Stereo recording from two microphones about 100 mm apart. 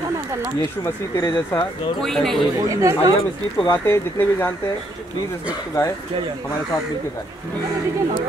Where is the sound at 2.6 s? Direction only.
30° right (ahead or behind).